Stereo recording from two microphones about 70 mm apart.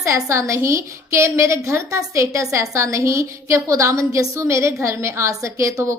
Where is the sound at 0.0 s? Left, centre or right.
Right.